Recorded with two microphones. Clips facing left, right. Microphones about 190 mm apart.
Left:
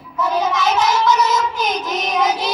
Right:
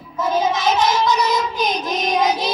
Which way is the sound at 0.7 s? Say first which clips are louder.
Left 1 dB; 35° right (ahead or behind).